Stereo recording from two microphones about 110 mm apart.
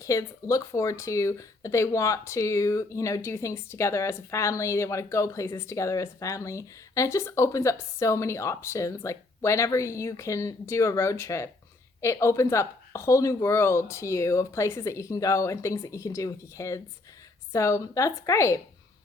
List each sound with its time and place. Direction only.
0.0 s speech: 30° left (ahead or behind)